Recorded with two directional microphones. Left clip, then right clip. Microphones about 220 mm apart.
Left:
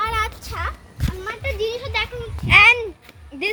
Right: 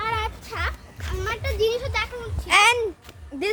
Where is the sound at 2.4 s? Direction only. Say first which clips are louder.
Left 5 dB; 10° right (ahead or behind).